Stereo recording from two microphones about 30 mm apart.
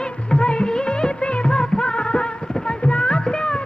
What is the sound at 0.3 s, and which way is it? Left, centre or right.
Music of bollywood, left.